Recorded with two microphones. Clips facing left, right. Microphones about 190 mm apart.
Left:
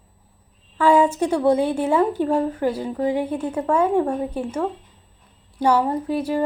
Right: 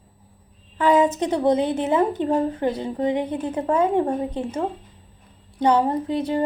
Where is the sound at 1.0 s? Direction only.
10° left (ahead or behind).